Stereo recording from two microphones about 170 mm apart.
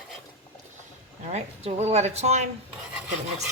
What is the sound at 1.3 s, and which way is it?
Speech, 40° right (ahead or behind).